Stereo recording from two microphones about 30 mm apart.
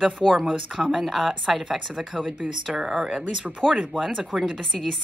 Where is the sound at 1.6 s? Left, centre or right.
Centre.